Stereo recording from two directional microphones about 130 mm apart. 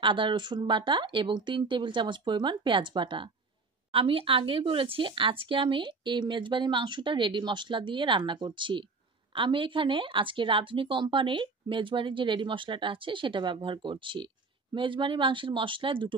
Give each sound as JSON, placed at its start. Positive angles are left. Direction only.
{"t": 0.0, "sound": "a woman's voice", "side_deg": -40}